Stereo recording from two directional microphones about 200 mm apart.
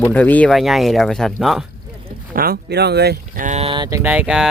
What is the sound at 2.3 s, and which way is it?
Speech, 50° right (ahead or behind).